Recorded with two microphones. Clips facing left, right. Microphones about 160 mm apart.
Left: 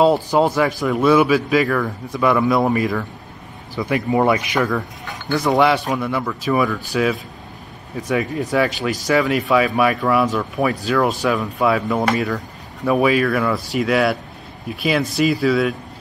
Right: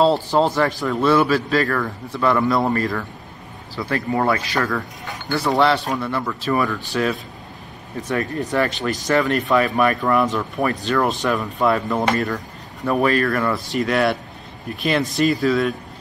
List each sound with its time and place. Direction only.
0.0 s speech: 15° left (ahead or behind)
3.7 s speech: 20° left (ahead or behind)
8.2 s speech: centre (ahead or behind)